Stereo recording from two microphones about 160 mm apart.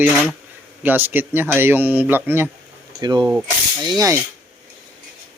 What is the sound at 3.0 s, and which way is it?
Speech, 25° right (ahead or behind).